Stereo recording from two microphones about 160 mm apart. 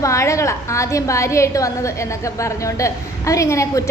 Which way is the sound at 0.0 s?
20° left (ahead or behind).